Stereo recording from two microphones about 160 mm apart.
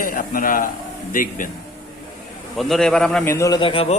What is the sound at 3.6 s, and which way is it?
Speech, 35° left (ahead or behind).